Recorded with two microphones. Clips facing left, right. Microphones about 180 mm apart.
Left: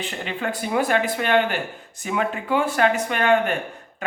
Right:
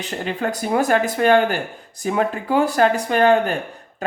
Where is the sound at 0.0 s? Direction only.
40° right (ahead or behind).